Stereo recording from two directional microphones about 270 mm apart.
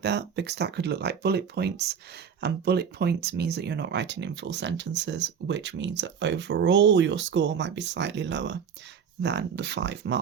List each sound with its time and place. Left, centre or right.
0.0 s speech: right